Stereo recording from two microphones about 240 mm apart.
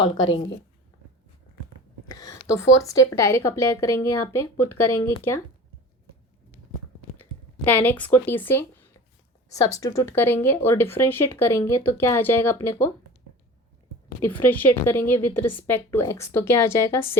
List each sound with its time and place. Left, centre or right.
0.0 s speech: centre
2.5 s speech: centre
7.2 s speech: centre
14.3 s speech: centre